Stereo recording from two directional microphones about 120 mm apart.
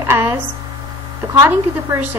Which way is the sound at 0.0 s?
20° right (ahead or behind).